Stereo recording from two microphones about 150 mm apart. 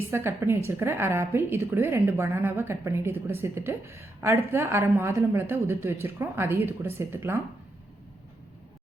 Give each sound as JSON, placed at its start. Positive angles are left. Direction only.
{"t": 0.1, "sound": "a woman's voice", "side_deg": -15}